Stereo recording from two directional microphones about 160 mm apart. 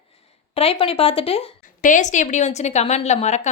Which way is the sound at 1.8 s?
50° left (ahead or behind).